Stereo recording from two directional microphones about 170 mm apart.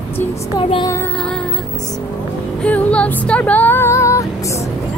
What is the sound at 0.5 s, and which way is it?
Music, 25° left (ahead or behind).